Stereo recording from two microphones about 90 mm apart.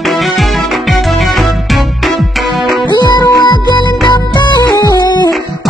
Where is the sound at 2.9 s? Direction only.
45° left (ahead or behind).